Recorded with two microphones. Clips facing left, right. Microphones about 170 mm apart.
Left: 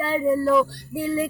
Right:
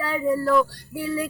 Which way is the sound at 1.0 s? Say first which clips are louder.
Left 3 dB; 25° left (ahead or behind).